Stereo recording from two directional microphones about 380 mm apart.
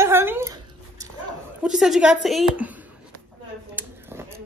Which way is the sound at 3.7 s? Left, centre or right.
Centre.